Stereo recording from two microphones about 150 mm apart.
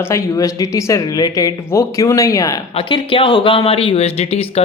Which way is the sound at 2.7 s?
35° left (ahead or behind).